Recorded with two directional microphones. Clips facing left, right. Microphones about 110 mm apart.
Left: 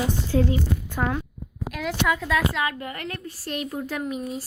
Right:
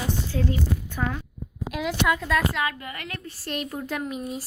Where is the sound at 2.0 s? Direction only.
Centre (ahead or behind).